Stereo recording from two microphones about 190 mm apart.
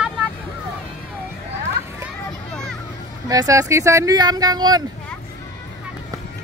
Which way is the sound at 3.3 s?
20° right (ahead or behind).